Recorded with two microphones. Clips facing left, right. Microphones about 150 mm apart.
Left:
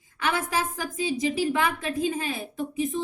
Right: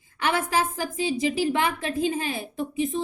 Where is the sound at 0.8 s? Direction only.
30° right (ahead or behind).